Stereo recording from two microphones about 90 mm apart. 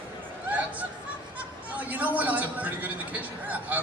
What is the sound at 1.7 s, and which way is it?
A man's voice, 20° right (ahead or behind).